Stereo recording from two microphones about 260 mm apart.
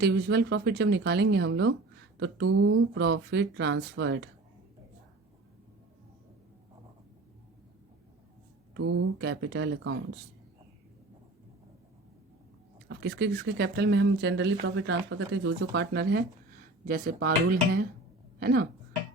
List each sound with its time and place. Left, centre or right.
0.0 s speech: right
2.5 s speech: right
8.7 s speech: right
12.9 s speech: right